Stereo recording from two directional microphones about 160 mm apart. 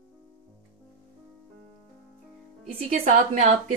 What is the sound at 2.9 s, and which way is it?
Speech, 50° right (ahead or behind).